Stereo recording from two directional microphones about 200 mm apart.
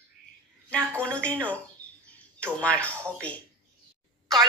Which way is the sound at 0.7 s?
5° left (ahead or behind).